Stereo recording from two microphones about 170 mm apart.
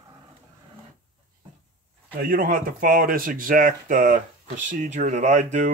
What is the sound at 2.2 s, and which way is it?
Speech, 55° right (ahead or behind).